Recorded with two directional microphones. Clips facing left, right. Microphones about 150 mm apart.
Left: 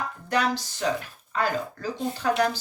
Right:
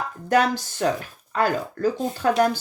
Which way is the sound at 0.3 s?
50° right (ahead or behind).